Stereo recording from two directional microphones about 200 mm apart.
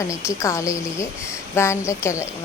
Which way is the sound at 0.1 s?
15° left (ahead or behind).